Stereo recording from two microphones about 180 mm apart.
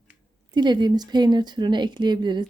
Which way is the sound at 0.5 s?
25° right (ahead or behind).